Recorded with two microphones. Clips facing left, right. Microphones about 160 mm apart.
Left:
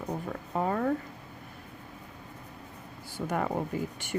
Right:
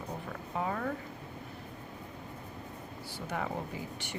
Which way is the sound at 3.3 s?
50° left (ahead or behind).